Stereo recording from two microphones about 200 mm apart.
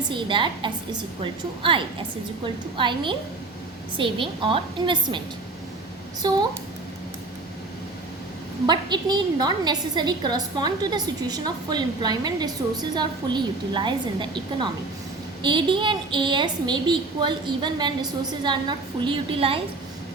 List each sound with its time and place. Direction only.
0.1 s a woman's voice: 25° right (ahead or behind)
6.2 s a woman's voice: 20° right (ahead or behind)
8.6 s a woman's voice: 20° right (ahead or behind)
15.4 s a woman's voice: 25° right (ahead or behind)